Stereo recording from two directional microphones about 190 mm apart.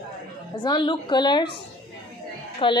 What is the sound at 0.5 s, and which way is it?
Speech, 25° left (ahead or behind).